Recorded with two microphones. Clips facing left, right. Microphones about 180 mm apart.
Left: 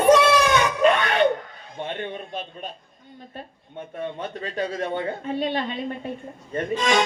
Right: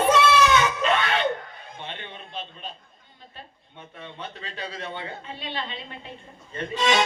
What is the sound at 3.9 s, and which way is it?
Speech, 45° left (ahead or behind).